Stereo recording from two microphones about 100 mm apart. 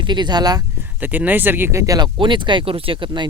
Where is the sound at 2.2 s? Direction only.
50° right (ahead or behind).